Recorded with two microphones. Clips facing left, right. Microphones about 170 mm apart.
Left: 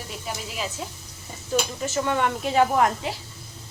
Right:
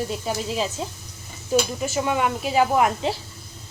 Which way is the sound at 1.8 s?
10° right (ahead or behind).